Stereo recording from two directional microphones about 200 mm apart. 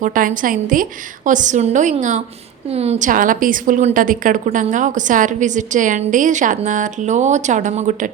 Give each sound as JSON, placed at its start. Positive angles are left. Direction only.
{"t": 0.0, "sound": "a woman's voice", "side_deg": -40}